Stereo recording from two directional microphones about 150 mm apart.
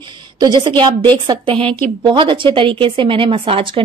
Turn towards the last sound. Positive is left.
turn(degrees=-40)  # may be behind; listen again after turning